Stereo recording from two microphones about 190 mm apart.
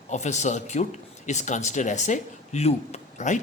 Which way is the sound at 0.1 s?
35° left (ahead or behind).